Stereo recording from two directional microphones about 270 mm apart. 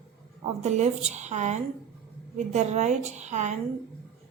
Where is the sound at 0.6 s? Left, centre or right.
Right.